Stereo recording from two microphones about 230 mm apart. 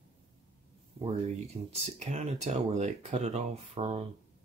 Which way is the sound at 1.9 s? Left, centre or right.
Right.